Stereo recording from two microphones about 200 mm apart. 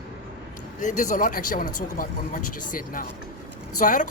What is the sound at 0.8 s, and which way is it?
Speech, 40° left (ahead or behind).